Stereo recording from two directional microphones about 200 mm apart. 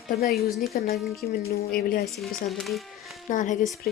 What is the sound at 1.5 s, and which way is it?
Speech, 50° left (ahead or behind).